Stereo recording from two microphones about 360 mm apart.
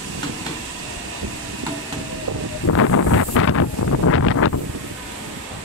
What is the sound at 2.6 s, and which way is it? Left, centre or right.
Wind noise, left.